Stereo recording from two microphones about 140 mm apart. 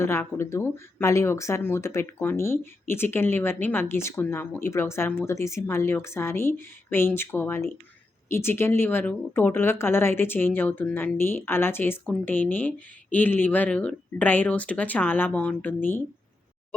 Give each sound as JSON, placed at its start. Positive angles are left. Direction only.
{"t": 0.0, "sound": "speech", "side_deg": 15}